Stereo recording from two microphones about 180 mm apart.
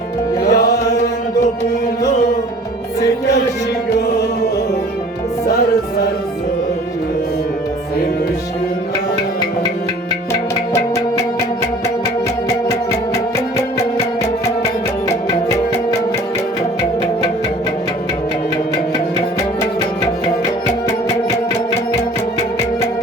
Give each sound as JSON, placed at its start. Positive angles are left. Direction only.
{"t": 0.4, "sound": "music", "side_deg": 60}